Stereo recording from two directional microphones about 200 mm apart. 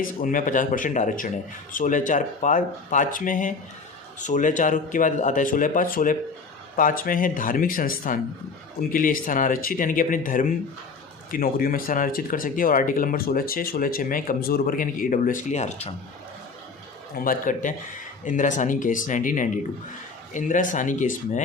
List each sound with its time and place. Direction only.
0.0 s speech: 45° left (ahead or behind)
17.2 s speech: 45° left (ahead or behind)